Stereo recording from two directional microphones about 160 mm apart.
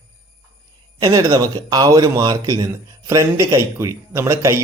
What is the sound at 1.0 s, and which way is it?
Speech, 20° right (ahead or behind).